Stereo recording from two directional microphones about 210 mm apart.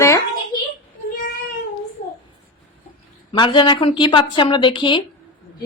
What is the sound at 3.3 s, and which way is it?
Speech, 20° left (ahead or behind).